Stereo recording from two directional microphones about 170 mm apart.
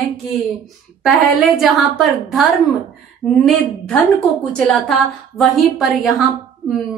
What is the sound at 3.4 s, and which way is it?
A woman's voice, 5° left (ahead or behind).